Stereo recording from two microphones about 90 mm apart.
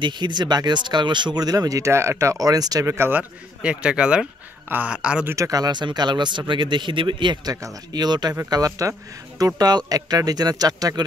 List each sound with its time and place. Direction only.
0.0 s speech: 55° right (ahead or behind)
2.9 s speech: 25° right (ahead or behind)
5.3 s speech: 40° right (ahead or behind); by 7.5 s 60° right (ahead or behind)
7.9 s speech: 50° right (ahead or behind)